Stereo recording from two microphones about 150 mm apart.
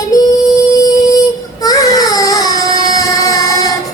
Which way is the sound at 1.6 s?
25° left (ahead or behind).